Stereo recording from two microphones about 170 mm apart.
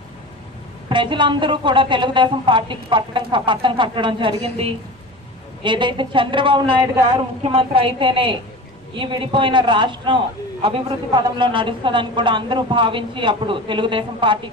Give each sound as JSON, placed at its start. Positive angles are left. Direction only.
{"t": 0.8, "sound": "a woman's voice", "side_deg": -30}